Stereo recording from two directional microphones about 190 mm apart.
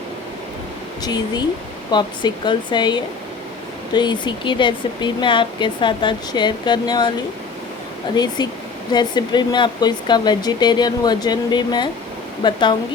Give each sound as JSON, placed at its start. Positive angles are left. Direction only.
{"t": 1.0, "sound": "speech", "side_deg": 20}
{"t": 8.1, "sound": "speech", "side_deg": 20}